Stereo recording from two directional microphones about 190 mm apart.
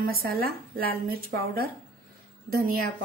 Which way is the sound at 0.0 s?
50° right (ahead or behind).